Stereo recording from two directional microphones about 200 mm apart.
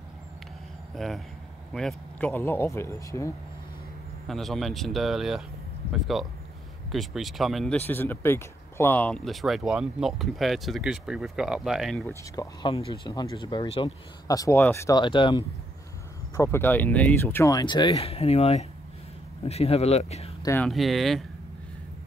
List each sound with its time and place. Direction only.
0.9 s speech: centre (ahead or behind)
4.3 s speech: centre (ahead or behind)
12.1 s speech: 15° left (ahead or behind)
16.3 s speech: 10° left (ahead or behind); by 20.3 s 30° left (ahead or behind)
20.4 s speech: 10° left (ahead or behind)